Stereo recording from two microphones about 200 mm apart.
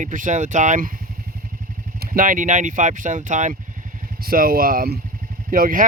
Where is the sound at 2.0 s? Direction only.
45° right (ahead or behind).